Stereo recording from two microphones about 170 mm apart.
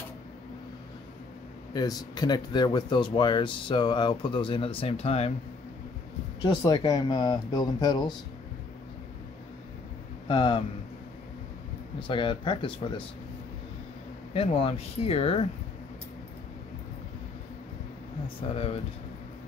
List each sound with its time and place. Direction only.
1.7 s speech: 25° left (ahead or behind)
6.6 s speech: 25° left (ahead or behind)
10.2 s speech: 30° left (ahead or behind)
12.1 s speech: 30° left (ahead or behind)
14.3 s speech: 35° left (ahead or behind)
18.5 s speech: 35° left (ahead or behind)